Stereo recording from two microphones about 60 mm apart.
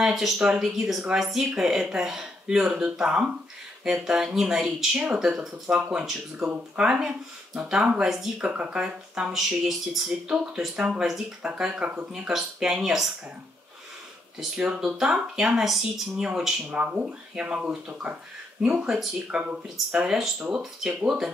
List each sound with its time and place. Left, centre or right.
0.0 s speech: centre
8.4 s speech: right; by 10.1 s centre
10.2 s speech: centre
14.4 s speech: centre
16.7 s speech: right
19.3 s speech: centre